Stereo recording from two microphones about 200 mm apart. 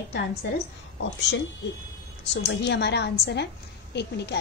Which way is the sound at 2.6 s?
60° left (ahead or behind).